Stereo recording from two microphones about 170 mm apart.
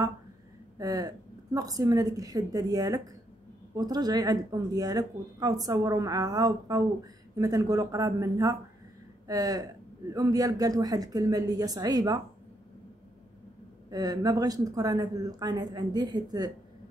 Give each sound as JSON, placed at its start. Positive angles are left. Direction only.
{"t": 0.7, "sound": "a woman's voice", "side_deg": -20}
{"t": 13.8, "sound": "a woman's voice", "side_deg": -25}